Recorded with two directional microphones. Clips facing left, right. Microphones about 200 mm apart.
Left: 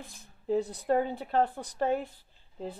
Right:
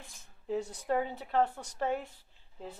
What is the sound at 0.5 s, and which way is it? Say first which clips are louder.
A woman's voice: left 5 dB; 35° left (ahead or behind).